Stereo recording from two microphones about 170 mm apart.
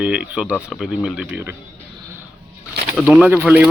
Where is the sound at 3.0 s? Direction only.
Centre (ahead or behind).